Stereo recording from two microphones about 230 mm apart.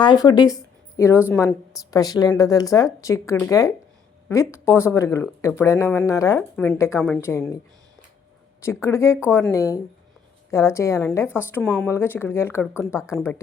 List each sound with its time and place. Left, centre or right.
0.0 s a woman's voice: centre
8.6 s speech: centre